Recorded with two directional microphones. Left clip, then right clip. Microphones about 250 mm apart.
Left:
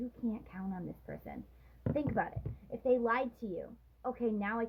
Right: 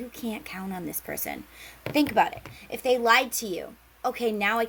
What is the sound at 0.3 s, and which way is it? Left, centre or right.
A woman's voice, right.